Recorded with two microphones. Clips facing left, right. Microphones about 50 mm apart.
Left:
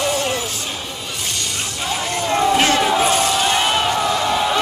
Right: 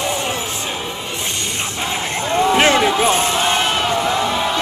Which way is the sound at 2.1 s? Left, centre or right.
Right.